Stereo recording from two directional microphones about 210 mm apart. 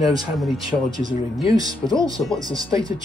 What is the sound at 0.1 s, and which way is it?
Speech, 20° right (ahead or behind).